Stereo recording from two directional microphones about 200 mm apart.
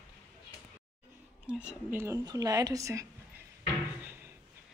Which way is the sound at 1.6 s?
10° right (ahead or behind).